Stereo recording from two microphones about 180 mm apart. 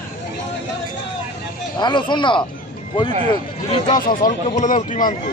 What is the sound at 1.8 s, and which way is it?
Speech, 25° left (ahead or behind).